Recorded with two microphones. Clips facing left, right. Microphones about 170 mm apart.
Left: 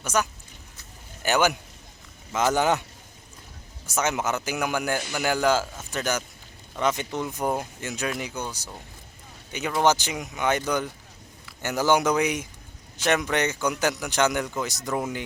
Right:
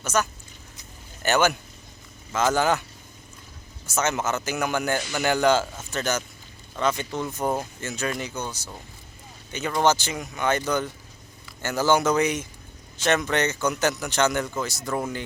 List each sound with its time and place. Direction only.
0.0 s speech: 15° left (ahead or behind)
3.8 s a man's voice: 15° left (ahead or behind)